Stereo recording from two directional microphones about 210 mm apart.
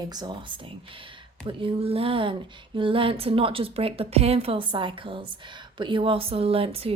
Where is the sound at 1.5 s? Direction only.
25° right (ahead or behind).